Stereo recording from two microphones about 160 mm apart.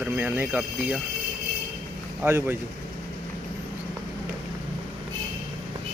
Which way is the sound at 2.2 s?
15° right (ahead or behind).